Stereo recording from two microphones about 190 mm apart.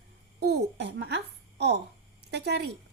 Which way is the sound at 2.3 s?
60° right (ahead or behind).